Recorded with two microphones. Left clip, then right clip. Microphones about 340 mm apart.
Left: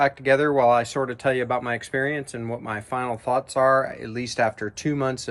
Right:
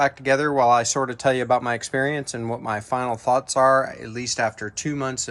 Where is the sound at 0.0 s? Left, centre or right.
Centre.